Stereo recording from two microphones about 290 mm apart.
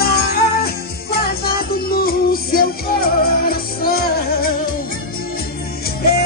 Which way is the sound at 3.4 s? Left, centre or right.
Left.